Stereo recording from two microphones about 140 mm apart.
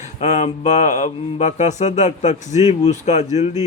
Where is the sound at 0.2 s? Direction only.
55° left (ahead or behind).